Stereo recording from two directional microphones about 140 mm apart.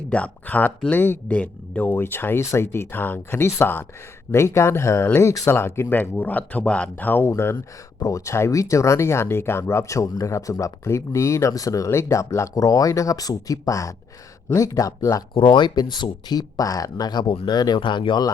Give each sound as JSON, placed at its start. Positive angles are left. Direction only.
{"t": 0.1, "sound": "speech", "side_deg": 10}
{"t": 15.4, "sound": "speech", "side_deg": 35}